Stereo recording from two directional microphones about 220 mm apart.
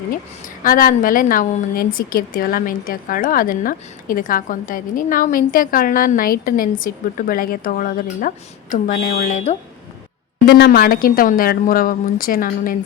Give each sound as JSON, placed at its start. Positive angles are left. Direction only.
{"t": 0.4, "sound": "a woman's voice", "side_deg": 40}
{"t": 10.4, "sound": "a woman's voice", "side_deg": 45}